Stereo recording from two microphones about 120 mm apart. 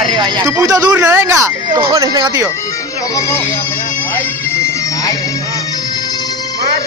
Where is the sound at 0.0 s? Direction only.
40° right (ahead or behind).